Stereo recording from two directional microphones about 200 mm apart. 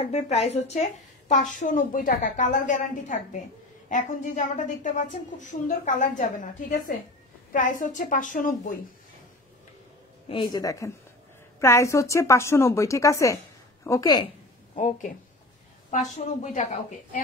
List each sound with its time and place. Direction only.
0.0 s a woman's voice: 30° left (ahead or behind)
10.2 s a woman's voice: 25° left (ahead or behind)
14.8 s a woman's voice: 40° left (ahead or behind)
16.5 s a woman's voice: 40° left (ahead or behind)